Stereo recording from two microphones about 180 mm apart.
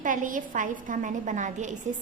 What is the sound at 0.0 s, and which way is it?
A woman's voice, 45° right (ahead or behind).